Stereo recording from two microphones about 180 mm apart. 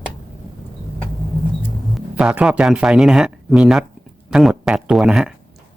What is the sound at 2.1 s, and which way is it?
Speech, 5° right (ahead or behind).